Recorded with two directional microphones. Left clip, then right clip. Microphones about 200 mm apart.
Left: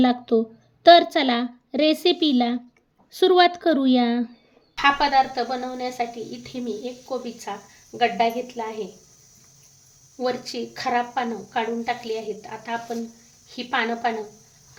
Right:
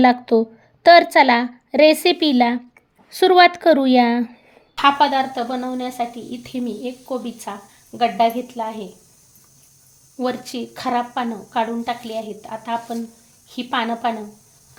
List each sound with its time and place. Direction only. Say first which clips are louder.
0.0 s a woman's voice: right 6 dB; 10° right (ahead or behind)
4.8 s a woman's voice: right 3 dB; 30° right (ahead or behind)
10.2 s a woman's voice: right 2 dB; 30° right (ahead or behind)